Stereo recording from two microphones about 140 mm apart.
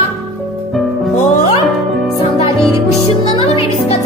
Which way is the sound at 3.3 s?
40° left (ahead or behind).